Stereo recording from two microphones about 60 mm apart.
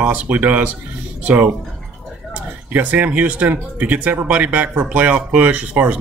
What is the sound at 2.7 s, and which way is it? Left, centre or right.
Speech, right.